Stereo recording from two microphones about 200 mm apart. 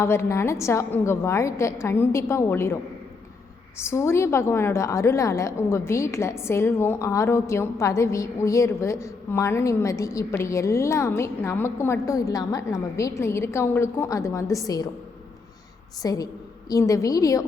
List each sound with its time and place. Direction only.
0.0 s a woman's voice: 15° left (ahead or behind)
3.8 s a woman's voice: 15° left (ahead or behind)
16.0 s a woman's voice: 20° left (ahead or behind)